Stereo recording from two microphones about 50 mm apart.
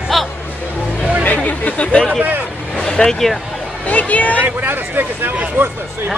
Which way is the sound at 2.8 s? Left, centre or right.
Centre.